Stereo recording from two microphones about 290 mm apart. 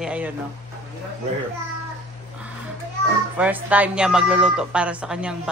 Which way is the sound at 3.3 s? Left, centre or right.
Centre.